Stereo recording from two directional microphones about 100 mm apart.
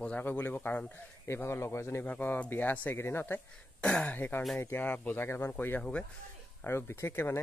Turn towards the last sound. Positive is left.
turn(degrees=25)  # may be behind; listen again after turning